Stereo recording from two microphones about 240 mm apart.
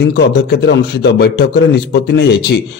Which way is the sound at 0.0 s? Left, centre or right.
Left.